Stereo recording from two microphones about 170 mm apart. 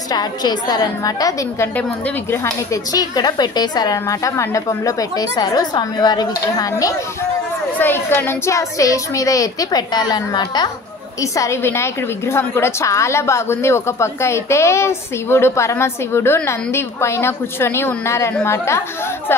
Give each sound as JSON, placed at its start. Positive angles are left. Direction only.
{"t": 0.1, "sound": "speech", "side_deg": 25}
{"t": 1.8, "sound": "a woman's voice", "side_deg": 10}
{"t": 2.4, "sound": "a woman's voice", "side_deg": 20}